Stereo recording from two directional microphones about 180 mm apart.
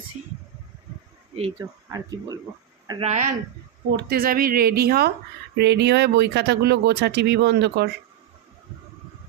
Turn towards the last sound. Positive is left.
turn(degrees=-65)  # may be behind; listen again after turning